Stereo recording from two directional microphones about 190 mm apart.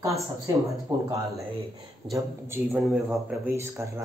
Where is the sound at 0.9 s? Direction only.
15° right (ahead or behind).